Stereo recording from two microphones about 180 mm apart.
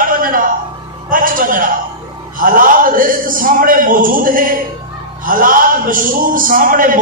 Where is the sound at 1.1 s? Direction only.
50° right (ahead or behind).